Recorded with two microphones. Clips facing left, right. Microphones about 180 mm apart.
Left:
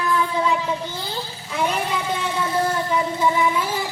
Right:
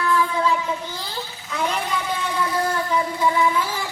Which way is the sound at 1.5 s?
25° left (ahead or behind).